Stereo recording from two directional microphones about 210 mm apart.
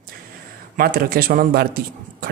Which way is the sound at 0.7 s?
45° right (ahead or behind).